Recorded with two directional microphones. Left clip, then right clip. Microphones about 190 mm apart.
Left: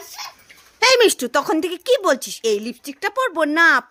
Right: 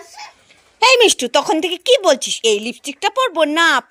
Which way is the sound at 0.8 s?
Centre (ahead or behind).